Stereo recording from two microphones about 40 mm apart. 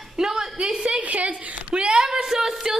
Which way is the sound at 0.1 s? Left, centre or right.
Centre.